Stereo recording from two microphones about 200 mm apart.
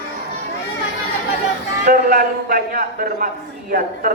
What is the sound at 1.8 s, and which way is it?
A woman's voice, 45° right (ahead or behind).